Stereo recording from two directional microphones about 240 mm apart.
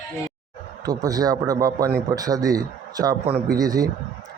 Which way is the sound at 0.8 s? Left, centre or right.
Centre.